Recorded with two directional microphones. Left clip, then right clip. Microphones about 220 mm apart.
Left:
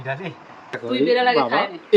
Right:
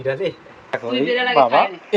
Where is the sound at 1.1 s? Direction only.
10° left (ahead or behind).